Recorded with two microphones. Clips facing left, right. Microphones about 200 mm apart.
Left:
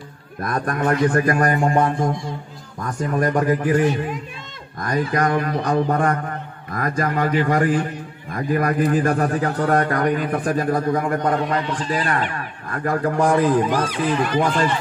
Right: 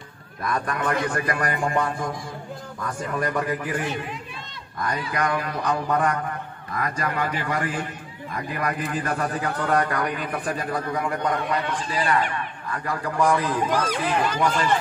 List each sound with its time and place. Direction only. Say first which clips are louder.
0.4 s a man's voice: left 4 dB; 45° left (ahead or behind)